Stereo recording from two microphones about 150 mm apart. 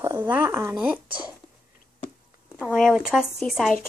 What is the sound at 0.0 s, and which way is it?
Speech, 15° right (ahead or behind).